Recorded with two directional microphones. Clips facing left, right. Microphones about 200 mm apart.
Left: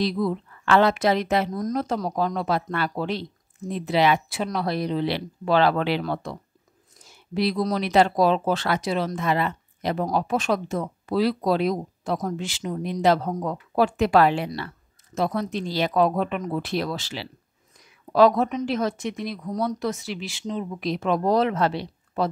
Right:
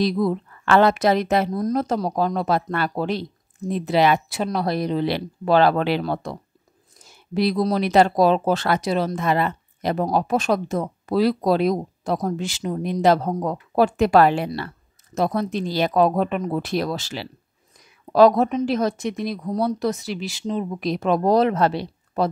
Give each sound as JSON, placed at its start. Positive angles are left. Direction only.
{"t": 0.0, "sound": "speech", "side_deg": -45}
{"t": 7.3, "sound": "speech", "side_deg": -45}